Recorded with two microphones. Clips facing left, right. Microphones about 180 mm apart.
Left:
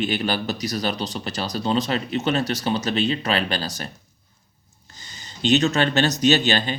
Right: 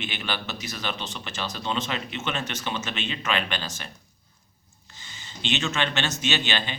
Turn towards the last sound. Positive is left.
turn(degrees=40)  # may be behind; listen again after turning